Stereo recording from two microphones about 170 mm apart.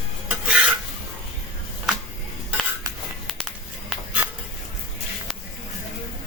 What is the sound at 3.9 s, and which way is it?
Music, 5° right (ahead or behind).